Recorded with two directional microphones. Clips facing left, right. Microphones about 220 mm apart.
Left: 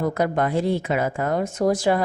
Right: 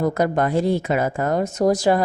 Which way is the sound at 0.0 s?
40° right (ahead or behind).